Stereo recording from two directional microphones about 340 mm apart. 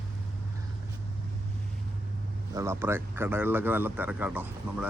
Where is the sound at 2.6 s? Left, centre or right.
Centre.